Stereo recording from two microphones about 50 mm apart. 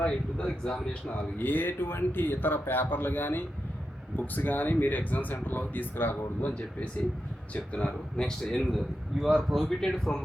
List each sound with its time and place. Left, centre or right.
0.0 s speech: centre
1.4 s speech: left
7.5 s speech: left
7.9 s speech: centre
8.4 s a man's voice: centre